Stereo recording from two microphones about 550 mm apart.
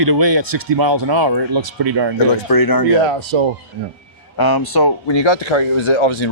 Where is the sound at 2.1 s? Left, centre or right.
Left.